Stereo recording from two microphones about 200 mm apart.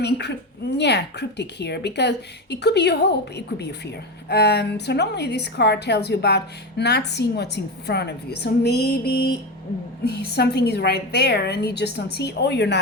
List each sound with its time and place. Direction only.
0.0 s a woman's voice: 55° left (ahead or behind)